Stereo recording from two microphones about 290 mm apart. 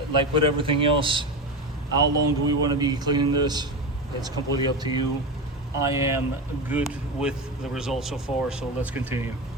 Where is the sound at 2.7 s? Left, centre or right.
Centre.